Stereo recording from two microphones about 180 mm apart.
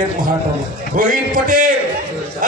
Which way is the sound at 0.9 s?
50° right (ahead or behind).